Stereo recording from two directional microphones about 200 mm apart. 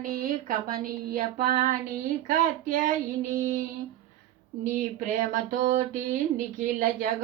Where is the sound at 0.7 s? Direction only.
40° right (ahead or behind).